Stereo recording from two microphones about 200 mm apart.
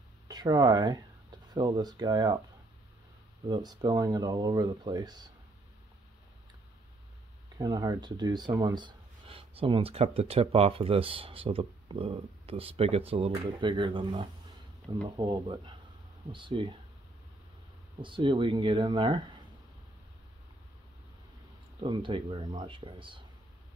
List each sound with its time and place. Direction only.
0.3 s speech: 20° right (ahead or behind)
3.4 s speech: 20° right (ahead or behind)
7.5 s speech: 20° right (ahead or behind)
18.0 s speech: 25° right (ahead or behind)
21.8 s speech: 25° right (ahead or behind)